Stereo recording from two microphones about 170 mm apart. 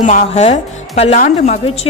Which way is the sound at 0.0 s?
45° left (ahead or behind).